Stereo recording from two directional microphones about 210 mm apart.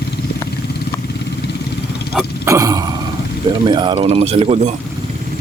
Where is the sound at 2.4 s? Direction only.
15° right (ahead or behind).